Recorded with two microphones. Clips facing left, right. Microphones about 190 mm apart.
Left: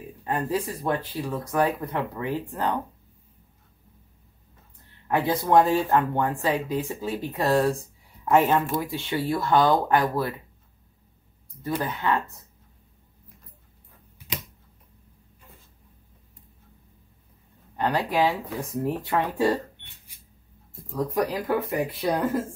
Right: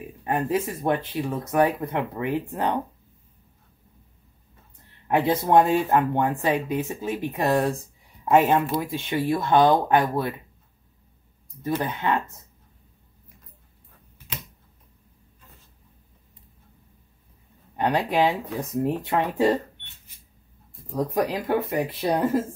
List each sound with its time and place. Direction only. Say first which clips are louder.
0.2 s speech: right 2 dB; 20° right (ahead or behind)
5.0 s speech: right 2 dB; 20° right (ahead or behind)
11.6 s speech: right 1 dB; 20° right (ahead or behind)
17.7 s speech: right 2 dB; 20° right (ahead or behind)
20.9 s speech: right 1 dB; 20° right (ahead or behind)